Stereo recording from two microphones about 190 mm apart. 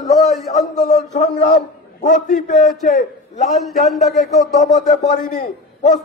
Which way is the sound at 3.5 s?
Centre (ahead or behind).